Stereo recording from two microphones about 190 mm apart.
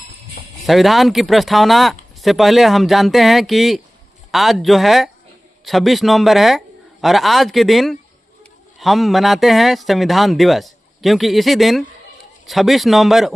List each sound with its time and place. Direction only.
0.6 s speech: centre (ahead or behind)